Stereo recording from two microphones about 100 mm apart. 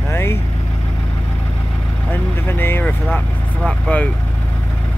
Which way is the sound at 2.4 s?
20° left (ahead or behind).